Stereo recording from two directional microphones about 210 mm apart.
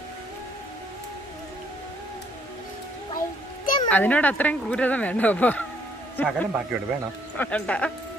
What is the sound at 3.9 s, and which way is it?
A man's voice, 5° left (ahead or behind).